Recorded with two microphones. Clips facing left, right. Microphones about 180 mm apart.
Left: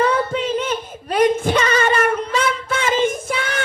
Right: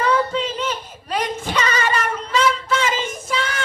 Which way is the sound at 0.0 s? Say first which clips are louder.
Left 1 dB; 50° left (ahead or behind).